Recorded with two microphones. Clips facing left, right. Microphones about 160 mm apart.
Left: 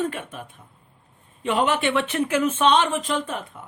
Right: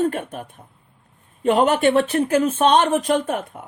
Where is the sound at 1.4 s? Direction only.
45° right (ahead or behind).